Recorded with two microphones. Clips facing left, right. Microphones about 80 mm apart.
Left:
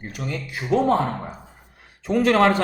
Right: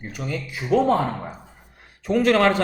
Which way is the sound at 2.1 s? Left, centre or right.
Centre.